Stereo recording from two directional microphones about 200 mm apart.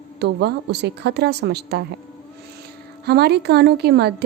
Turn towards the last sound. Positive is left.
turn(degrees=-55)  # may be behind; listen again after turning